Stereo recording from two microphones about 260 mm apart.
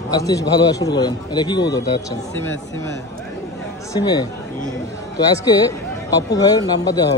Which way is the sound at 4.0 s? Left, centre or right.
Centre.